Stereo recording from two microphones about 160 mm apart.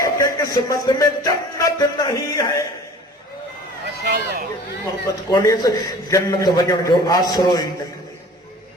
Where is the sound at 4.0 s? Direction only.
75° right (ahead or behind).